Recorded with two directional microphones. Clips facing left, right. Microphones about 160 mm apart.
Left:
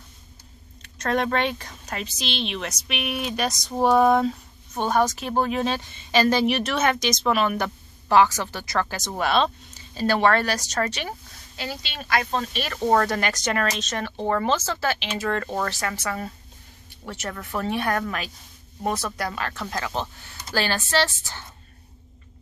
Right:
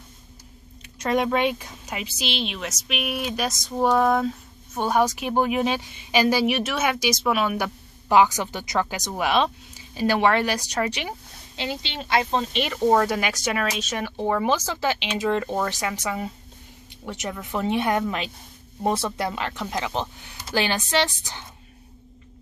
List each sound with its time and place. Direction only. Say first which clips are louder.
0.8 s speech: right 1 dB; 10° right (ahead or behind)
12.7 s speech: right 1 dB; 10° right (ahead or behind)